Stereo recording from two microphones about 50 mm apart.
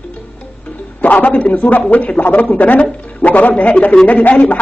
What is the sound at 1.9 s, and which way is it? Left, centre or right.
Speech, left.